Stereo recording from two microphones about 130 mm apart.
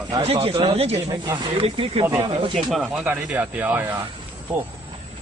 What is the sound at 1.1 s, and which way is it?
Speech, 35° right (ahead or behind).